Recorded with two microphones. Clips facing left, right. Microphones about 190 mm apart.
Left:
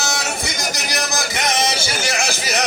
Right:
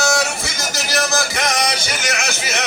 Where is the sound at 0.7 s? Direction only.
20° left (ahead or behind).